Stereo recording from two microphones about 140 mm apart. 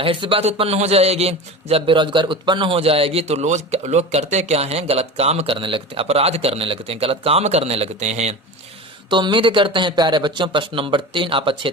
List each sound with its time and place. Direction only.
0.0 s a man's voice: 40° right (ahead or behind)
9.0 s speech: 35° right (ahead or behind)